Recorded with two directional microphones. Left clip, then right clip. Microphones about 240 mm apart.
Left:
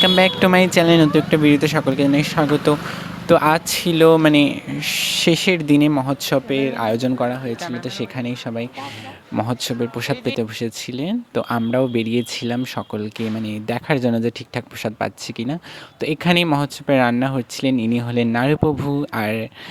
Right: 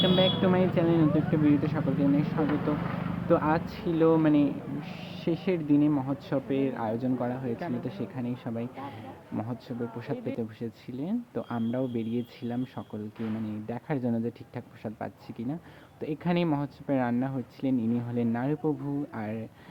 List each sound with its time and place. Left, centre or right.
0.0 s speech: left